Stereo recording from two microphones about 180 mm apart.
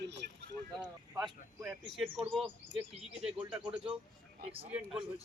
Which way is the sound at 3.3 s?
5° right (ahead or behind).